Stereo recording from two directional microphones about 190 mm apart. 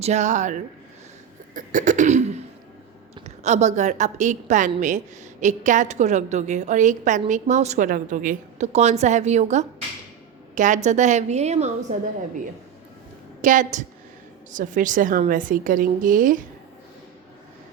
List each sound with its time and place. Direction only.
0.0 s a woman's voice: 35° right (ahead or behind)
13.4 s a woman's voice: 40° right (ahead or behind)